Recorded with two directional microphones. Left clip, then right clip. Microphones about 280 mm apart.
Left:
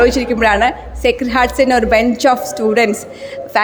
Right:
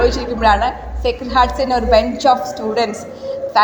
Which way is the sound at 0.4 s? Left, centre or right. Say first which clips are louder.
Even; left.